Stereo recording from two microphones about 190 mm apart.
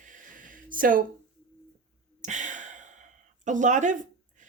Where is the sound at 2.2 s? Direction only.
40° right (ahead or behind).